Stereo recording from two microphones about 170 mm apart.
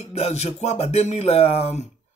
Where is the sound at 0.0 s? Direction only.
40° left (ahead or behind).